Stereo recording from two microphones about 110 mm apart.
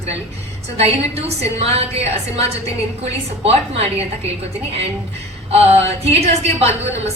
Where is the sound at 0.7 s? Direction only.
65° right (ahead or behind).